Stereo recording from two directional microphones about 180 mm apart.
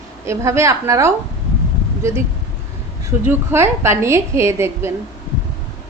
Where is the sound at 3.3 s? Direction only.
15° right (ahead or behind).